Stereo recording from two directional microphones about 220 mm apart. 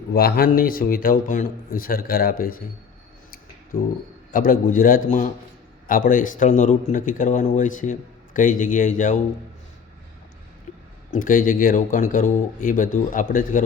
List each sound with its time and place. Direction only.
0.1 s a man's voice: 45° left (ahead or behind)
4.3 s a man's voice: 40° left (ahead or behind)
11.1 s a man's voice: 40° left (ahead or behind)